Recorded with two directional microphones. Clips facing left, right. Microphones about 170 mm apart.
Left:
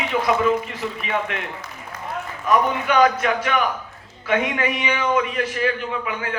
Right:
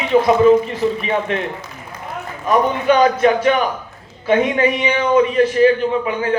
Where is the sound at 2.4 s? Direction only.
30° right (ahead or behind).